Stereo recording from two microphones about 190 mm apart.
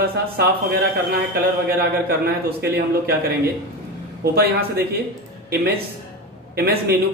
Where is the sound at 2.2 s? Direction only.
55° right (ahead or behind).